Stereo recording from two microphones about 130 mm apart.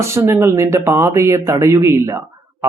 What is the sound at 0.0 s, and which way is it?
Speech, 20° right (ahead or behind).